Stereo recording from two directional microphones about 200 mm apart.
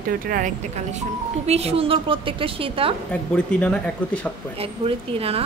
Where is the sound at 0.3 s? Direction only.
35° right (ahead or behind).